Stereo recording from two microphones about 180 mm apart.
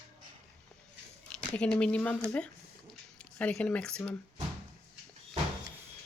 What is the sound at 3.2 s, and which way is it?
Speech, 5° left (ahead or behind).